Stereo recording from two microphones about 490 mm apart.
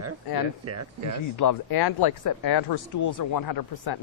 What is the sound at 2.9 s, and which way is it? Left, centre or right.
Speech, left.